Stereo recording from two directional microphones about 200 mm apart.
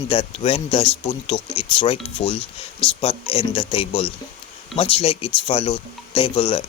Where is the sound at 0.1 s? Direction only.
25° left (ahead or behind).